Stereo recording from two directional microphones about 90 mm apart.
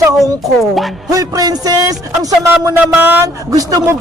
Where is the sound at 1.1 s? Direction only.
45° right (ahead or behind).